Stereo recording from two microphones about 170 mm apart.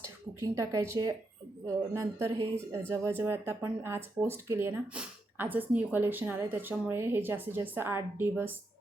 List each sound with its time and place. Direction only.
0.0 s speech: 15° right (ahead or behind)